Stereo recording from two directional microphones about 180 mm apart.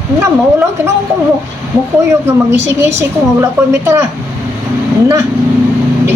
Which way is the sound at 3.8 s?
15° right (ahead or behind).